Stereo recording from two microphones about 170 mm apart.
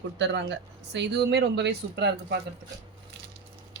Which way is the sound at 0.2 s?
90° right.